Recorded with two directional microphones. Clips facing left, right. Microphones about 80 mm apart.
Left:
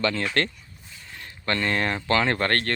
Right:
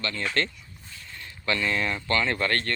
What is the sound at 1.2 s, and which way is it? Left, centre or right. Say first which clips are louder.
Speech: left 1 dB; left.